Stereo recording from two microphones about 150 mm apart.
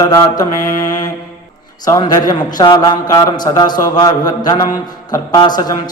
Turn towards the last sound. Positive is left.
turn(degrees=30)  # may be behind; listen again after turning